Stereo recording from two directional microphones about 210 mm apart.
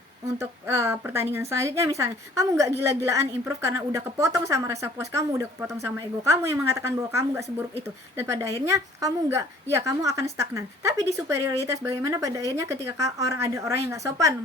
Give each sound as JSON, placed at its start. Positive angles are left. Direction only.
{"t": 0.3, "sound": "a woman's voice", "side_deg": -15}